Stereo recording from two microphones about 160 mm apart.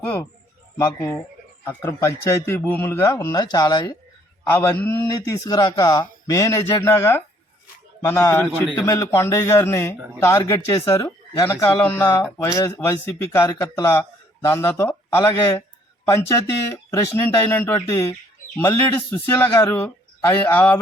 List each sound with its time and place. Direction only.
0.8 s a man's voice: 15° left (ahead or behind)
4.5 s a man's voice: 15° left (ahead or behind)